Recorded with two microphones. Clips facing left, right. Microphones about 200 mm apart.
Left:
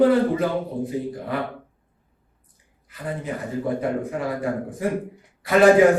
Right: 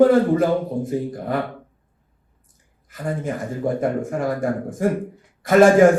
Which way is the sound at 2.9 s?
45° right (ahead or behind).